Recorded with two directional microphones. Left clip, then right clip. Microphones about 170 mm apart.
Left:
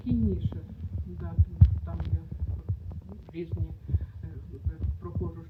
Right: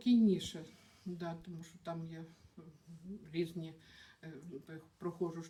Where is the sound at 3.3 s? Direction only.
Centre (ahead or behind).